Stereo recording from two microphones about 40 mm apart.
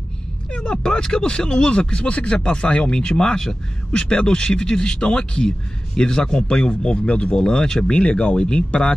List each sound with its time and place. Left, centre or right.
0.5 s speech: left